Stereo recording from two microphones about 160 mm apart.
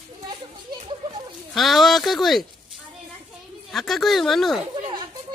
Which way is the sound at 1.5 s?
Centre (ahead or behind).